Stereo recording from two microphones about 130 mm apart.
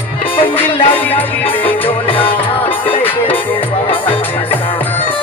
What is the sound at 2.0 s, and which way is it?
Music, 45° left (ahead or behind).